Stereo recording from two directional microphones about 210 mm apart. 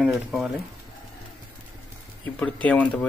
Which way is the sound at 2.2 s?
5° left (ahead or behind).